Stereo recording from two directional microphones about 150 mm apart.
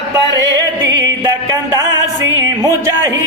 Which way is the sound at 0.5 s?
25° right (ahead or behind).